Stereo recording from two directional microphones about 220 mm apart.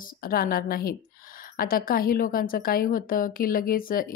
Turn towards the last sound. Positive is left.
turn(degrees=40)  # may be behind; listen again after turning